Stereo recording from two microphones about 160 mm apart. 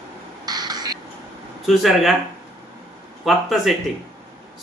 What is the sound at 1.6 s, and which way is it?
Speech, centre (ahead or behind).